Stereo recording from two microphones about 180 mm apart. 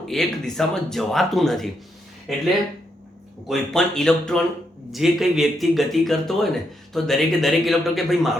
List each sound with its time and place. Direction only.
0.1 s speech: centre (ahead or behind)
3.5 s speech: 5° left (ahead or behind)